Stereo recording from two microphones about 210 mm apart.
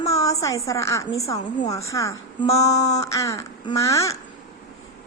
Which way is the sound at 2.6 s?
30° left (ahead or behind).